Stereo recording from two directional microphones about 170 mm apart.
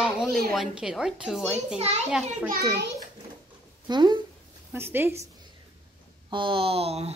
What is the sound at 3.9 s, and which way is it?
Speech, 25° right (ahead or behind).